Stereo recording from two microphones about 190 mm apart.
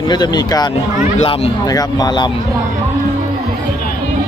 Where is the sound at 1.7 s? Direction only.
20° left (ahead or behind).